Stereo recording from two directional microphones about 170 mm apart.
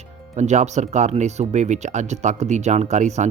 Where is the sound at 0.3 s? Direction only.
45° right (ahead or behind).